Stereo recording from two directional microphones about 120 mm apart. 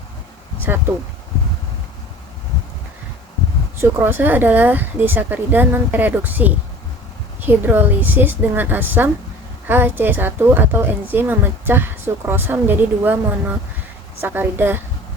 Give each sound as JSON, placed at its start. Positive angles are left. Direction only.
{"t": 3.8, "sound": "a woman's voice", "side_deg": -20}